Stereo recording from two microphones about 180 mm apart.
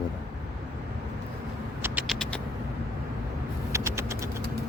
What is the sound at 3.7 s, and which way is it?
Vehicle, 15° right (ahead or behind).